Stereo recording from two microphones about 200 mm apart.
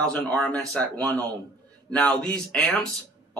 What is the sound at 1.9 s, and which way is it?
Speech, 5° left (ahead or behind).